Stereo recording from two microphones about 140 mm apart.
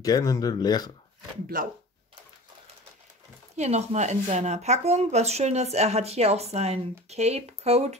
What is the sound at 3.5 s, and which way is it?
Speech, 55° right (ahead or behind).